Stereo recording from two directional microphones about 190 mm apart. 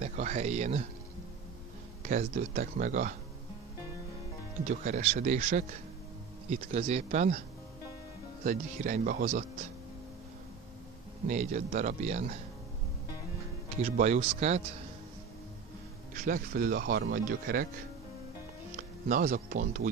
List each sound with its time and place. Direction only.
0.0 s a sound: 40° right (ahead or behind)
2.0 s speech: 40° right (ahead or behind)
4.6 s speech: 40° right (ahead or behind)
8.5 s speech: 40° right (ahead or behind)
11.2 s speech: 40° right (ahead or behind)
13.8 s speech: 35° right (ahead or behind)
16.3 s speech: 45° right (ahead or behind)
19.0 s speech: 45° right (ahead or behind)